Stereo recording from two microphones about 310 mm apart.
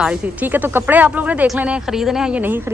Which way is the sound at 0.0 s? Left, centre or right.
Centre.